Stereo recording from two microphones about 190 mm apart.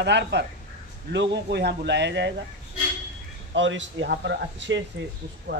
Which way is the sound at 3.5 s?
75° right (ahead or behind).